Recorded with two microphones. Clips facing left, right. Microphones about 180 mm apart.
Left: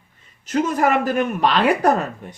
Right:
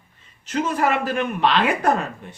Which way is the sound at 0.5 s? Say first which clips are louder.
Left 3 dB; 45° left (ahead or behind).